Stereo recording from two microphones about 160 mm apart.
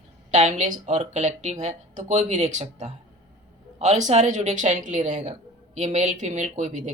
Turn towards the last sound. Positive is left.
turn(degrees=-50)  # may be behind; listen again after turning